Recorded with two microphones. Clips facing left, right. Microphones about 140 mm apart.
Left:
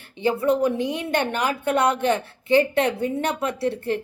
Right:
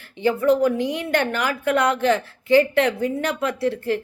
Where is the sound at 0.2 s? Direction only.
20° left (ahead or behind).